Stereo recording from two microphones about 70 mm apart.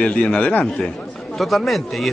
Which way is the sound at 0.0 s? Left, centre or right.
Centre.